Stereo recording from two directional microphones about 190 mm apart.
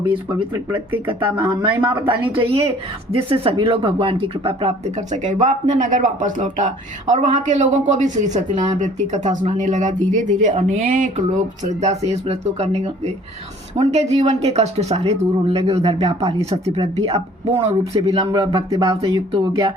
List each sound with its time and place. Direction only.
1.5 s speech: 25° right (ahead or behind)
1.9 s speech: 10° right (ahead or behind)
2.3 s speech: 30° right (ahead or behind)